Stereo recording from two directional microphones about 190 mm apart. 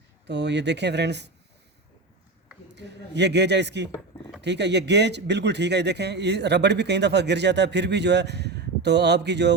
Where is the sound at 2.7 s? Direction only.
65° right (ahead or behind).